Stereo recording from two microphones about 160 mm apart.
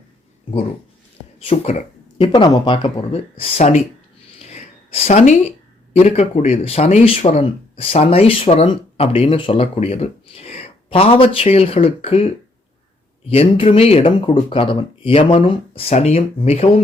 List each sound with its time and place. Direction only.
1.5 s speech: 40° left (ahead or behind)
2.2 s speech: 25° left (ahead or behind)
4.4 s a sound: 40° left (ahead or behind)
5.9 s speech: 40° left (ahead or behind)
13.3 s speech: 35° left (ahead or behind)